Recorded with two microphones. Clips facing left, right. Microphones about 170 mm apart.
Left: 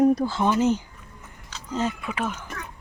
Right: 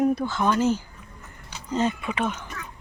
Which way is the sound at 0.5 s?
20° left (ahead or behind).